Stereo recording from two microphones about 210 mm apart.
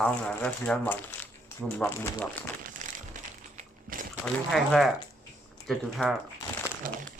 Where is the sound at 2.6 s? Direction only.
40° right (ahead or behind).